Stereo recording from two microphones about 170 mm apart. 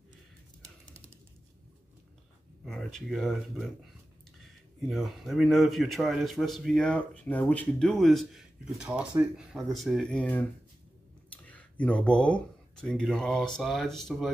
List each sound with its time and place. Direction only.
2.6 s speech: centre (ahead or behind)
11.4 s speech: 10° left (ahead or behind)